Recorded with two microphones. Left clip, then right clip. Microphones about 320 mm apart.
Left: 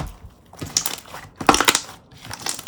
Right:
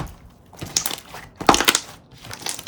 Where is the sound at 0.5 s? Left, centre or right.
Centre.